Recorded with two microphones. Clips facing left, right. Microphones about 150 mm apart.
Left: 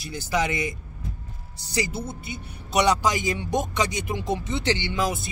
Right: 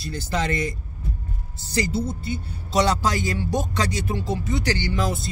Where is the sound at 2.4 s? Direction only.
15° left (ahead or behind).